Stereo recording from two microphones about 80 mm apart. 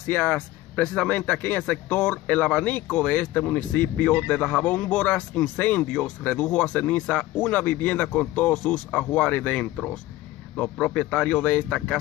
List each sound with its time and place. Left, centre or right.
0.1 s speech: left